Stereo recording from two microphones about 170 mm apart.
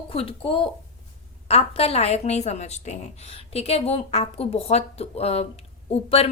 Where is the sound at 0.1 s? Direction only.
35° left (ahead or behind).